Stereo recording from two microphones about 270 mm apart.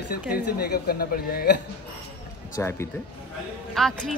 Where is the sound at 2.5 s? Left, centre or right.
Centre.